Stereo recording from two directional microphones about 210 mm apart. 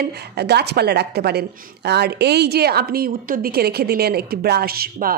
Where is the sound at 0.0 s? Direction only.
50° right (ahead or behind).